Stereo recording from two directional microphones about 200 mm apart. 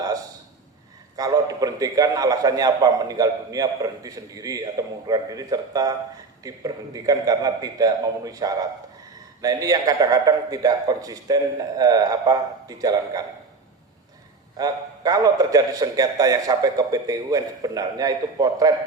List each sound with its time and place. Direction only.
1.1 s a man's voice: 20° right (ahead or behind)
14.6 s a man's voice: 20° right (ahead or behind)